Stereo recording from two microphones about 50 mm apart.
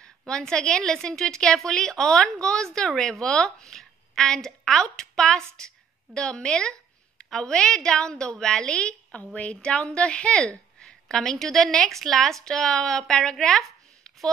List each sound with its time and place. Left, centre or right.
0.3 s a woman's voice: centre
10.8 s a woman's voice: centre